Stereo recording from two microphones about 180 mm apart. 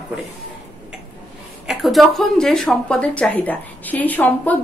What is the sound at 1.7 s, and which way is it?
Speech, centre (ahead or behind).